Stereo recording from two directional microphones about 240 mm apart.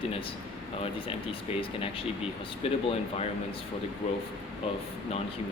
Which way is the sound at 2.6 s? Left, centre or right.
Left.